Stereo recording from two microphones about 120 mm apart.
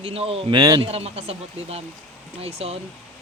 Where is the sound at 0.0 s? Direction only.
55° right (ahead or behind).